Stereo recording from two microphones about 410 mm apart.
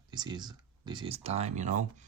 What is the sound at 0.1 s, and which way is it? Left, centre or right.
Speech, centre.